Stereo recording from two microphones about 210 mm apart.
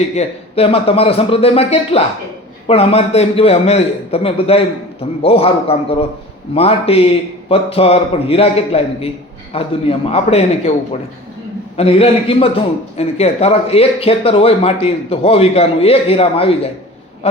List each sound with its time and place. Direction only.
0.2 s speech: 30° left (ahead or behind)
11.8 s speech: 25° left (ahead or behind)